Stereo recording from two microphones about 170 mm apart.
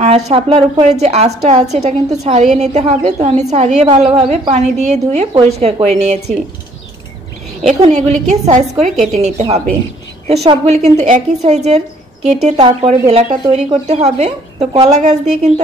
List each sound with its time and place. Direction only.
0.0 s a woman's voice: 35° right (ahead or behind)
7.6 s a woman's voice: 45° right (ahead or behind)